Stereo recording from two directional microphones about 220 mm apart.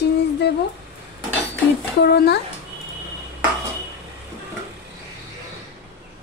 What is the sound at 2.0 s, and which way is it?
Speech, 50° left (ahead or behind).